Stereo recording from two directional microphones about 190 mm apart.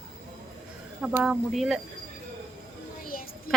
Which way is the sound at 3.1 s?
50° left (ahead or behind).